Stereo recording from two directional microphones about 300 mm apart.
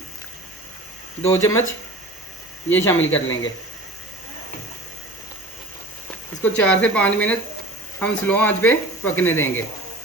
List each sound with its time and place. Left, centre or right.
1.2 s speech: centre
2.6 s speech: centre
3.0 s a man's voice: left
6.4 s speech: centre